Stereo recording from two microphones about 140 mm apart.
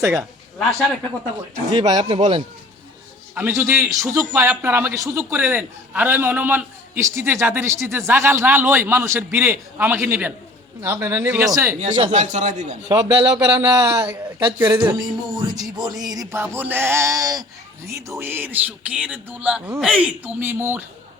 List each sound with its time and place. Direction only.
0.1 s a man's voice: centre (ahead or behind)
1.7 s speech: 30° right (ahead or behind)
3.3 s a man's voice: 15° right (ahead or behind)
12.1 s a man's voice: 60° right (ahead or behind)
12.9 s a man's voice: 25° right (ahead or behind)